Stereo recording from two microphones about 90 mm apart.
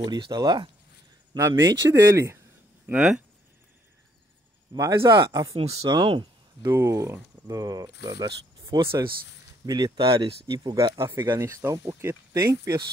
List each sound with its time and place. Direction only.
0.0 s speech: 55° right (ahead or behind)
1.3 s speech: 35° right (ahead or behind)
2.9 s speech: 20° right (ahead or behind)
4.7 s speech: 35° right (ahead or behind)
5.8 s speech: 50° right (ahead or behind)
6.6 s speech: 30° right (ahead or behind); by 9.9 s 50° right (ahead or behind)
9.9 s speech: 60° right (ahead or behind)
11.0 s speech: 25° right (ahead or behind)